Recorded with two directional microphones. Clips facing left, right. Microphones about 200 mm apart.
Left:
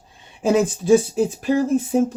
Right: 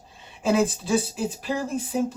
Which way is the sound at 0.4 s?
45° left (ahead or behind).